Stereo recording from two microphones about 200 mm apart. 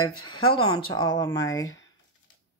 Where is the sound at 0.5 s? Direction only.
25° left (ahead or behind).